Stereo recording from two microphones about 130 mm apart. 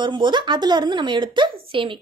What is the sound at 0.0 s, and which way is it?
A woman's voice, 35° right (ahead or behind).